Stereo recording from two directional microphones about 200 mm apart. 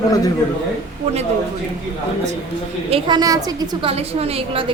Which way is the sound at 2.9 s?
25° right (ahead or behind).